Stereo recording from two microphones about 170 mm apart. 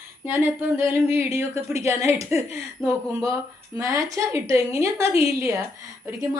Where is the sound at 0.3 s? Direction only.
10° right (ahead or behind).